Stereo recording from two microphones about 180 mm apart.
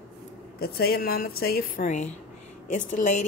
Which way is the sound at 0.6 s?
55° left (ahead or behind).